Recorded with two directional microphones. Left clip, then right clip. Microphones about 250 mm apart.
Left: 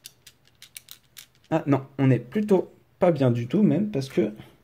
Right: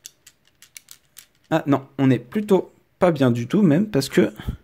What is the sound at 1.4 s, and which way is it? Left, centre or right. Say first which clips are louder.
Speech: right 4 dB; centre.